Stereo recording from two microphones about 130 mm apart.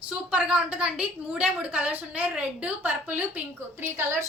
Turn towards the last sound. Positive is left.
turn(degrees=-15)  # may be behind; listen again after turning